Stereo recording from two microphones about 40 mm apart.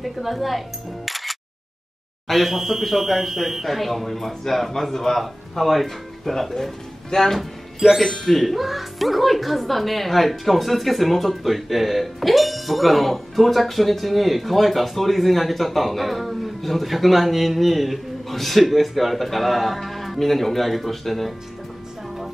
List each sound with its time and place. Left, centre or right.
0.0 s speech: centre